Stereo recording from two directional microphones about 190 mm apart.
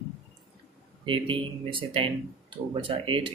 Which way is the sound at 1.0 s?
25° right (ahead or behind).